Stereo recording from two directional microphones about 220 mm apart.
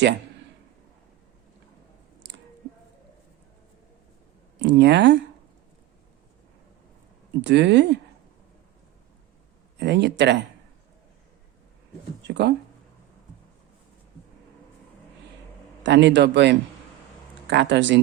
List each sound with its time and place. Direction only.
4.6 s speech: 50° right (ahead or behind)
7.4 s speech: 55° right (ahead or behind)
9.8 s speech: 50° right (ahead or behind)
12.3 s speech: 50° right (ahead or behind)
15.8 s speech: 50° right (ahead or behind)